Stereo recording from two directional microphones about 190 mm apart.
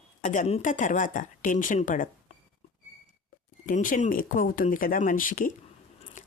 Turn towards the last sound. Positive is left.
turn(degrees=45)  # may be behind; listen again after turning